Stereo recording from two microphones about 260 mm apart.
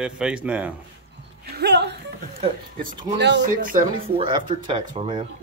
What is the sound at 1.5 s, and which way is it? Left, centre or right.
Speech, right.